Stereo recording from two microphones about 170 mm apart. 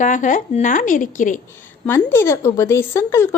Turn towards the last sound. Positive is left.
turn(degrees=15)  # may be behind; listen again after turning